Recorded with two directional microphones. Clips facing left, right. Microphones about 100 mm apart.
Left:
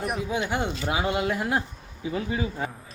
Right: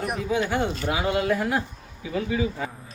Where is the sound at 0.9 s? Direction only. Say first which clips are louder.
Right 1 dB; 15° left (ahead or behind).